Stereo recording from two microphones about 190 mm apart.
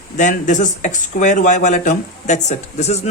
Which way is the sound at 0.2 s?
40° left (ahead or behind).